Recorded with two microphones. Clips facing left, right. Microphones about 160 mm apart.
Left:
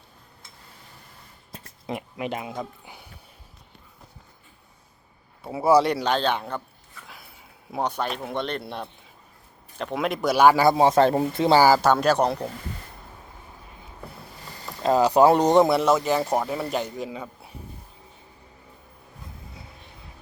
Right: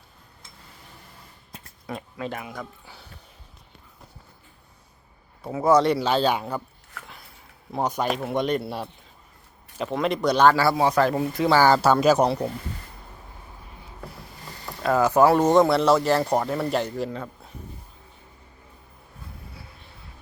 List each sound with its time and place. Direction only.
1.9 s speech: 15° left (ahead or behind)
5.5 s speech: 10° left (ahead or behind); by 6.6 s 10° right (ahead or behind)
7.0 s a sound: 80° right
7.8 s speech: 10° right (ahead or behind); by 11.6 s 25° left (ahead or behind)
11.8 s speech: 5° right (ahead or behind)
14.8 s speech: 15° left (ahead or behind)
15.7 s speech: 5° left (ahead or behind)